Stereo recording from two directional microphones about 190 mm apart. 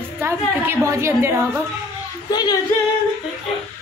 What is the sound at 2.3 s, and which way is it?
Female singing, 20° left (ahead or behind).